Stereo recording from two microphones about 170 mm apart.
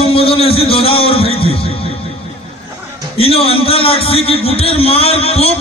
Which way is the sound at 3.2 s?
35° left (ahead or behind).